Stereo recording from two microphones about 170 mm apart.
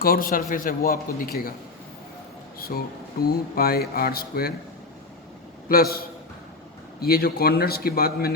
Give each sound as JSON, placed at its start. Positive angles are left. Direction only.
{"t": 0.0, "sound": "speech", "side_deg": 60}
{"t": 2.6, "sound": "speech", "side_deg": 60}
{"t": 5.6, "sound": "speech", "side_deg": 60}